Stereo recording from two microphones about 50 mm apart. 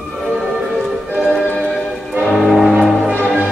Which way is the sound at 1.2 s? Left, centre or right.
Centre.